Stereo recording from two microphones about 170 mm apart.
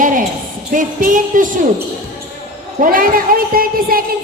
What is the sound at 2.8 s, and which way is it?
Speech, 55° right (ahead or behind).